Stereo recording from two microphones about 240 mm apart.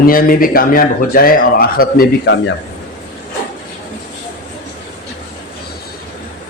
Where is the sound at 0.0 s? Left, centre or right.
Left.